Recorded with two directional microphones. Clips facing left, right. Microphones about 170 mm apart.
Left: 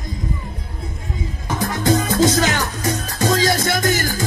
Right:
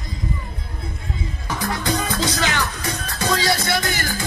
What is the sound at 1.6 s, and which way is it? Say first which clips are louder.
Music: left 5 dB; 45° left (ahead or behind).